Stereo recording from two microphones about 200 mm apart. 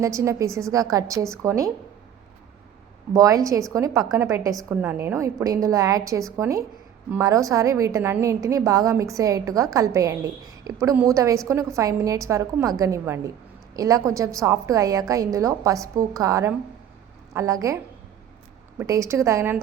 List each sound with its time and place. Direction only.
0.0 s a woman's voice: 15° right (ahead or behind)
3.1 s a woman's voice: 15° right (ahead or behind)
18.8 s a woman's voice: 15° right (ahead or behind)